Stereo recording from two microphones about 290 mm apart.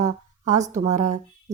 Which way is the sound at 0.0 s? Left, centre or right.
Right.